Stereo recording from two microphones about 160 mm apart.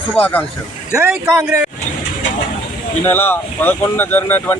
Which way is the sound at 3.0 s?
15° left (ahead or behind).